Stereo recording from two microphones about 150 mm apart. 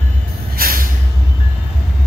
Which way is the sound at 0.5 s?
75° right (ahead or behind).